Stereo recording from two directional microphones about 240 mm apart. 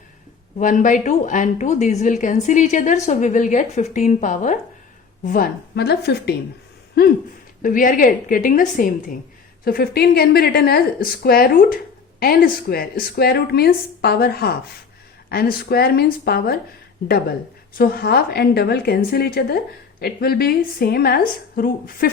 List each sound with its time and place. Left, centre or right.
0.6 s a woman's voice: left